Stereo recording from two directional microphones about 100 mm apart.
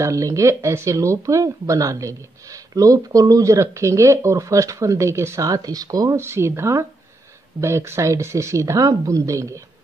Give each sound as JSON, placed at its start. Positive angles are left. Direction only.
{"t": 0.0, "sound": "speech", "side_deg": -30}
{"t": 6.2, "sound": "speech", "side_deg": -25}